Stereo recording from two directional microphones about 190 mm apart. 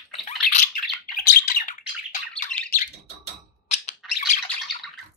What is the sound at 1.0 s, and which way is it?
Bird, 45° left (ahead or behind).